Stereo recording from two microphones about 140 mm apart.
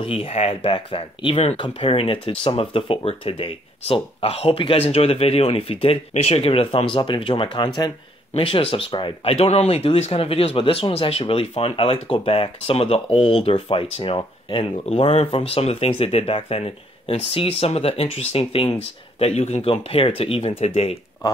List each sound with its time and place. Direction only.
0.0 s speech: 40° left (ahead or behind)